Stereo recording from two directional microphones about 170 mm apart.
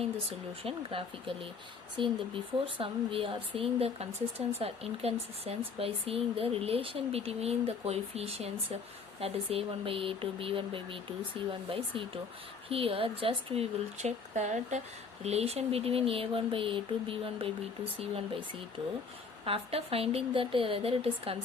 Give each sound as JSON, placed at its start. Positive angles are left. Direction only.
{"t": 0.6, "sound": "speech", "side_deg": -35}